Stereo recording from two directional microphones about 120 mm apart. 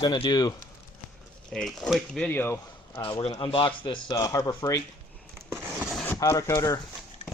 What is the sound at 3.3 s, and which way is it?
Speech, 40° left (ahead or behind).